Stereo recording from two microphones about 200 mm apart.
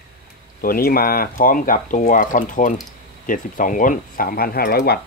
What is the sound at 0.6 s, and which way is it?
Speech, 45° left (ahead or behind).